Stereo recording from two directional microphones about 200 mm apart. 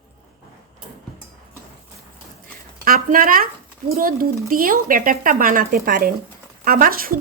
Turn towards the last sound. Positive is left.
turn(degrees=-45)  # may be behind; listen again after turning